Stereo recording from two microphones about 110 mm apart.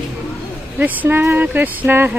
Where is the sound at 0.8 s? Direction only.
20° right (ahead or behind).